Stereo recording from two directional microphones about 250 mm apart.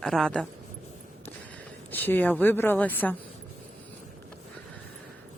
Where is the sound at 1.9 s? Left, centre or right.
Centre.